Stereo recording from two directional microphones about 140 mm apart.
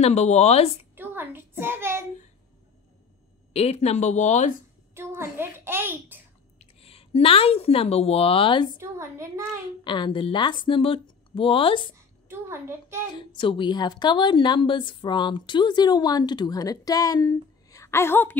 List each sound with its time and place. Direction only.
0.0 s speech: 50° left (ahead or behind)
0.9 s a sound: 15° right (ahead or behind)
3.5 s speech: 50° left (ahead or behind)
4.9 s a sound: 20° right (ahead or behind)
6.6 s speech: 45° left (ahead or behind)
8.7 s a woman's voice: 20° right (ahead or behind)
9.8 s a woman's voice: 35° left (ahead or behind)
12.3 s a woman's voice: 15° right (ahead or behind)
13.1 s a woman's voice: 35° left (ahead or behind); by 18.4 s 15° left (ahead or behind)